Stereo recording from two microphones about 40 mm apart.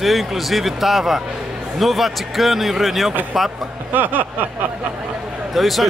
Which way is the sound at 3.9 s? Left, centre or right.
Right.